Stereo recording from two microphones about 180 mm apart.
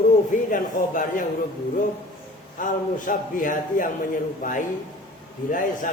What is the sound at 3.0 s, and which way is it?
A man's voice, 45° left (ahead or behind).